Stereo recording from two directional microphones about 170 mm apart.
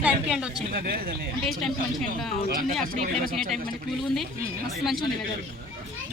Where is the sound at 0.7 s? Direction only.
60° right (ahead or behind).